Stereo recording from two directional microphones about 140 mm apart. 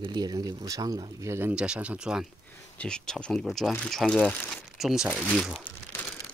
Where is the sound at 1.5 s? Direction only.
5° right (ahead or behind).